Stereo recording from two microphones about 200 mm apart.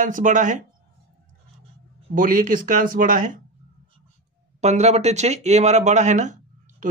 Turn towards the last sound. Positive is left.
turn(degrees=-40)  # may be behind; listen again after turning